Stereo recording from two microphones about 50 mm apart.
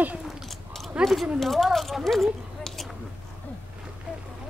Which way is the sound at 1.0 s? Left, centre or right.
Centre.